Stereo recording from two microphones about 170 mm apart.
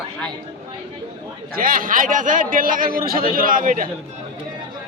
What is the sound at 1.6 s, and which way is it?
A man's voice, 55° right (ahead or behind).